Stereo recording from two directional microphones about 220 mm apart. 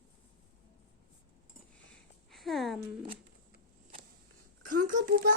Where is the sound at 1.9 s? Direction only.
Centre (ahead or behind).